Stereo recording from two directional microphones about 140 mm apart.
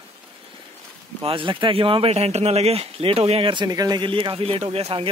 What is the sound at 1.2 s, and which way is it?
Speech, 35° right (ahead or behind).